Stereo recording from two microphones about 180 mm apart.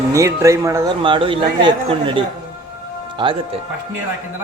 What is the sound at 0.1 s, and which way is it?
Speech, 15° right (ahead or behind).